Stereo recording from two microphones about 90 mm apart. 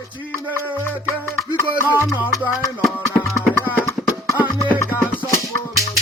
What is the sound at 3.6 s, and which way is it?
Music, 20° left (ahead or behind).